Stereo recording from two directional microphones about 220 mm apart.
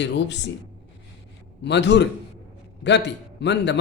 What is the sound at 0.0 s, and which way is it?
Speech, 55° left (ahead or behind).